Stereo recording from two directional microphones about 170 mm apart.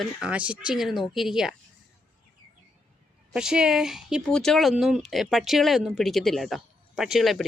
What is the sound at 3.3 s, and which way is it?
Speech, 5° right (ahead or behind).